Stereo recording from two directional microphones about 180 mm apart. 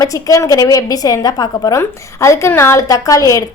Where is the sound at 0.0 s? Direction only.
20° left (ahead or behind).